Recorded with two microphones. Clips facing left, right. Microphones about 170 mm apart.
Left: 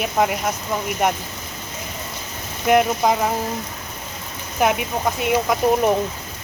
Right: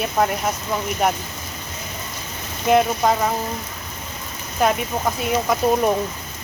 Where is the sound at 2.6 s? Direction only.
5° left (ahead or behind).